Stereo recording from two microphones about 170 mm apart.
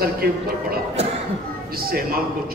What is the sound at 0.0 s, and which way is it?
A man's voice, 60° right (ahead or behind).